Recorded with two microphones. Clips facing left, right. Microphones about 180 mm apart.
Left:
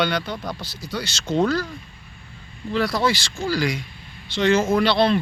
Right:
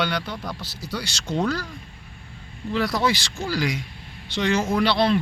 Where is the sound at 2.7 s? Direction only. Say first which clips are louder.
Left 1 dB; 20° right (ahead or behind).